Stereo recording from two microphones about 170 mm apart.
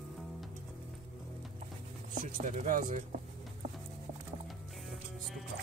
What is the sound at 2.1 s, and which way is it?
Speech, 50° right (ahead or behind).